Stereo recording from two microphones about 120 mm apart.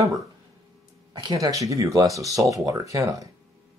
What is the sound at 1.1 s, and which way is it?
Speech, 35° right (ahead or behind).